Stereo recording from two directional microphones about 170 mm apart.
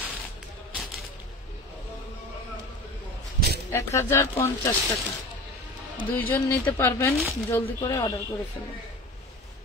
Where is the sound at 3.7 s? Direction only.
15° left (ahead or behind).